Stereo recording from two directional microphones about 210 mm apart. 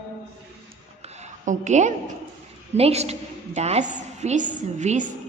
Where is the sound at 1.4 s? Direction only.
35° right (ahead or behind).